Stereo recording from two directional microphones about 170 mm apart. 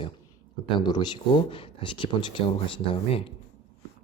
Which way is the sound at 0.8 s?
25° left (ahead or behind).